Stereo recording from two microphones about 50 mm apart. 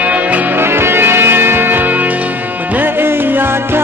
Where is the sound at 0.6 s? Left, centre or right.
Right.